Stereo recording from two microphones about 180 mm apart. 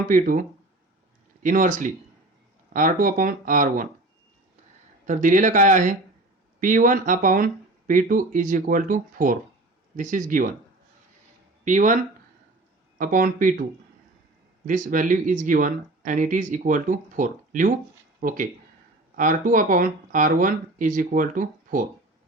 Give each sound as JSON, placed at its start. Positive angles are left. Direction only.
{"t": 0.1, "sound": "speech", "side_deg": -45}
{"t": 5.0, "sound": "speech", "side_deg": -45}
{"t": 11.6, "sound": "speech", "side_deg": -45}
{"t": 13.0, "sound": "speech", "side_deg": -50}
{"t": 14.7, "sound": "speech", "side_deg": -45}